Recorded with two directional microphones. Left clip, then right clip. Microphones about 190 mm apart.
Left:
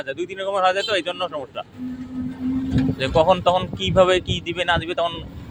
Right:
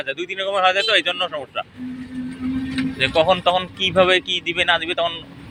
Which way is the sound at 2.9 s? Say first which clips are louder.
Right 1 dB; 20° left (ahead or behind).